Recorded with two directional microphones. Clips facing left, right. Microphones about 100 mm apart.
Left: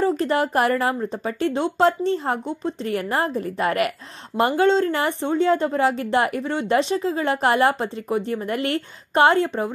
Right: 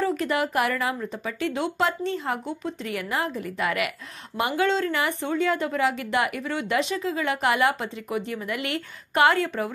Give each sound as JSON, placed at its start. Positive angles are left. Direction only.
{"t": 0.0, "sound": "speech", "side_deg": 35}